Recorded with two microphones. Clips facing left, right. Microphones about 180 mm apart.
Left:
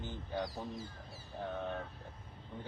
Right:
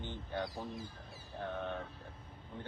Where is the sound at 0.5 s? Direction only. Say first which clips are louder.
Even; 15° right (ahead or behind).